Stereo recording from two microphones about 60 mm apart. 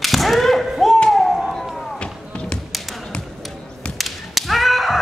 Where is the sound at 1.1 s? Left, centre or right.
Centre.